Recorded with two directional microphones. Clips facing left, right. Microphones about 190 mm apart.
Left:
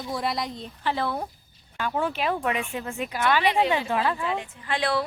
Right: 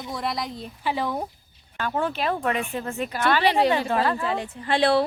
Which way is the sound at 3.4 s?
35° right (ahead or behind).